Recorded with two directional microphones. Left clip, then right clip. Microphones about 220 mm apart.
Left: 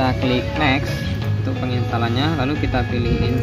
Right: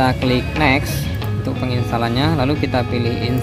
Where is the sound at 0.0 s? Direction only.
15° right (ahead or behind).